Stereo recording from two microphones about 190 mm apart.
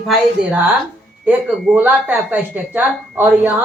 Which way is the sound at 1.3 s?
10° right (ahead or behind).